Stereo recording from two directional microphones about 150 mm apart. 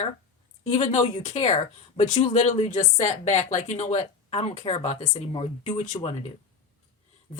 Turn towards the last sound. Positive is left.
turn(degrees=50)  # may be behind; listen again after turning